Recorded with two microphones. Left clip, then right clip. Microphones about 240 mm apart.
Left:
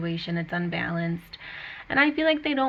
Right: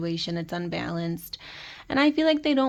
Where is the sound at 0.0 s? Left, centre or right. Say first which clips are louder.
Right 1 dB; right.